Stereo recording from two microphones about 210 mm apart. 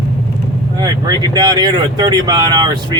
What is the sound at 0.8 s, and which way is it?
Speech, 20° right (ahead or behind).